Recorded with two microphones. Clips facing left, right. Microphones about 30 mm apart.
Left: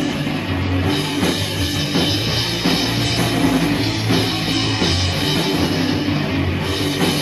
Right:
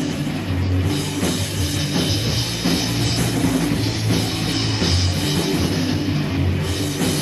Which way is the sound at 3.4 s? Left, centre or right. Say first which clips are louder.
Left 3 dB; left.